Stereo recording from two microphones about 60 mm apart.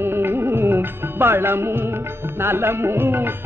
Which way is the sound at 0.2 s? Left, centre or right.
Right.